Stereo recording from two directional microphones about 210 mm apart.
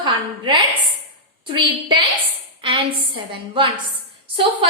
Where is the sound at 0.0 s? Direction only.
20° right (ahead or behind).